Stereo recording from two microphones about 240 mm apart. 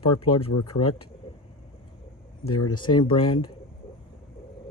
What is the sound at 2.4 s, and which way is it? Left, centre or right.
Speech, left.